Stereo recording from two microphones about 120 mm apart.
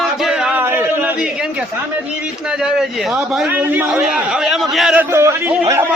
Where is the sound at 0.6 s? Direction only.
20° right (ahead or behind).